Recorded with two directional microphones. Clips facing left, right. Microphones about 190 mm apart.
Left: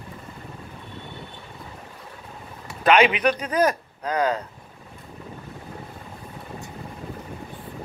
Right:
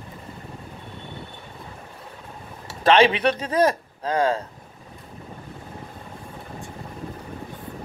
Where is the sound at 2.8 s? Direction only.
30° right (ahead or behind).